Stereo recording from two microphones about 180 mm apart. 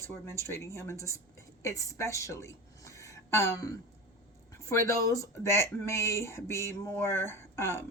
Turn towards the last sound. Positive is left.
turn(degrees=15)  # may be behind; listen again after turning